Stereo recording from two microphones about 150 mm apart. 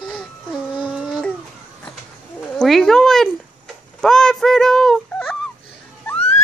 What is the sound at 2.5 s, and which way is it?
Speech, 5° left (ahead or behind).